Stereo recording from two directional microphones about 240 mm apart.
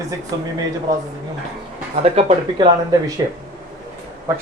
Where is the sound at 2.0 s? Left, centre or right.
Right.